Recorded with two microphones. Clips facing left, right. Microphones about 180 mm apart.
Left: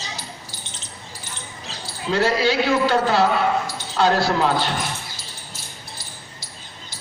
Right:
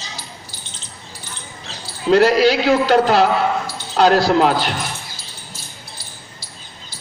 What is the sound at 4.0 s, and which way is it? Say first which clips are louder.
Speech: right 5 dB; 75° right (ahead or behind).